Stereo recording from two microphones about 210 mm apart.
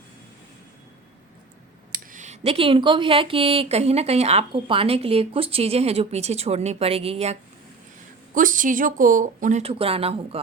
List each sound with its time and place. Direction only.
1.9 s speech: 40° right (ahead or behind)